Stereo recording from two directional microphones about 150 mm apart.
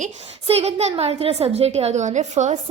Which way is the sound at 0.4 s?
45° right (ahead or behind).